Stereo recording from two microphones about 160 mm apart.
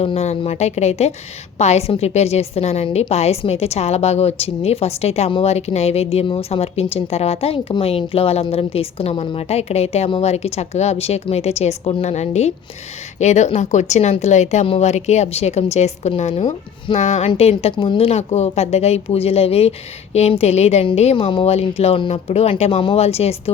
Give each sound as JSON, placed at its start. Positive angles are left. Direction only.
{"t": 0.0, "sound": "a woman's voice", "side_deg": 40}